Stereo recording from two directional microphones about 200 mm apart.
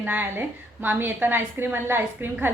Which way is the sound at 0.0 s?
10° right (ahead or behind).